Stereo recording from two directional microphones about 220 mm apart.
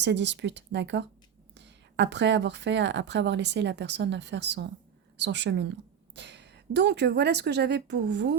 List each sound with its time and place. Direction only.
0.0 s speech: 50° right (ahead or behind)